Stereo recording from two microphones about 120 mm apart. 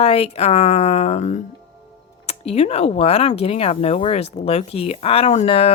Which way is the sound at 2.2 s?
60° left (ahead or behind).